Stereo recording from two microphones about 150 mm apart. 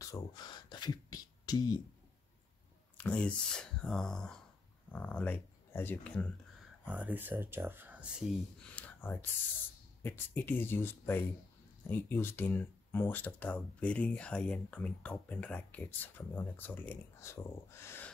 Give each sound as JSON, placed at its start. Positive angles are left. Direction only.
{"t": 0.0, "sound": "a sound", "side_deg": 25}
{"t": 3.0, "sound": "speech", "side_deg": 10}
{"t": 6.8, "sound": "speech", "side_deg": -10}
{"t": 8.7, "sound": "speech", "side_deg": 10}